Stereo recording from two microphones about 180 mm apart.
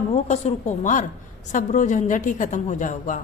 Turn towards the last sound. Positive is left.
turn(degrees=45)  # may be behind; listen again after turning